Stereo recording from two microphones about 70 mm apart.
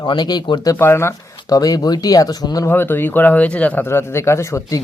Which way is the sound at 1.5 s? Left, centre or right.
Left.